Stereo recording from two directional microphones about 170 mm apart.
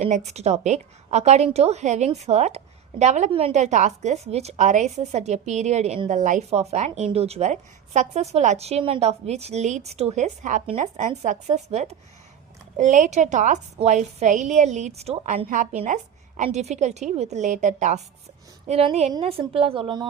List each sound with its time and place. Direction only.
0.3 s a woman's voice: 40° right (ahead or behind)